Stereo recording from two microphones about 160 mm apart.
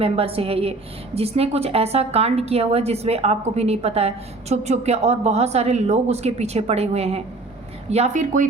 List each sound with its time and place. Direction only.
0.0 s a woman's voice: 35° right (ahead or behind); by 8.4 s 55° right (ahead or behind)